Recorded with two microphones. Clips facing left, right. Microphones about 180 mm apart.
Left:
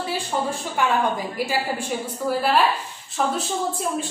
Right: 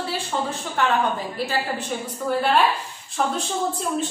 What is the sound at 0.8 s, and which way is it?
A woman's voice, 10° left (ahead or behind).